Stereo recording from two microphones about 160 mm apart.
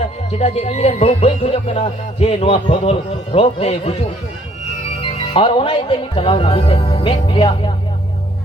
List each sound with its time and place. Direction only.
0.3 s speech: 40° left (ahead or behind)
5.1 s speech: 35° left (ahead or behind)